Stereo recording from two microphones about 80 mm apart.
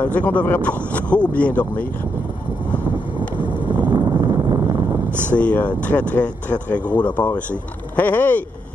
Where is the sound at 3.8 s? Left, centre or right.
Right.